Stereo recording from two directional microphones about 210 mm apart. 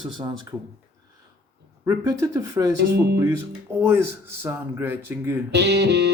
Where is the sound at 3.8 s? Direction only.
10° right (ahead or behind).